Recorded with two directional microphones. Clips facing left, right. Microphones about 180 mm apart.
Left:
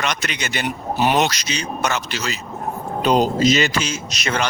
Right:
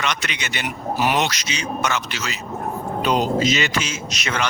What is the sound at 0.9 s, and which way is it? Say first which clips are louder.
Speech: left 3 dB; 25° left (ahead or behind).